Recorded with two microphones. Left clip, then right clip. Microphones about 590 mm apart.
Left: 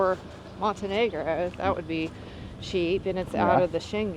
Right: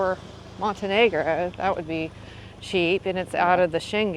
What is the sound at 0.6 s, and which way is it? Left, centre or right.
Speech, centre.